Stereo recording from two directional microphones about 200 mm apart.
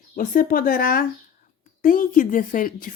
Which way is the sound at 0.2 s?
45° left (ahead or behind).